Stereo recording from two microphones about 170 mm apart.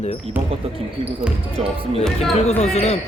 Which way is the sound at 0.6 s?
35° right (ahead or behind).